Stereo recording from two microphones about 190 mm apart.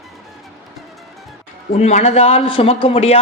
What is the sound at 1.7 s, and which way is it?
A man's voice, 35° left (ahead or behind).